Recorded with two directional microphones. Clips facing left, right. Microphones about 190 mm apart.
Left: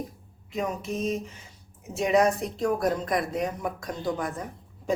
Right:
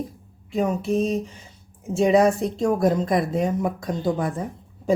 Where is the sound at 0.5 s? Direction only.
35° right (ahead or behind).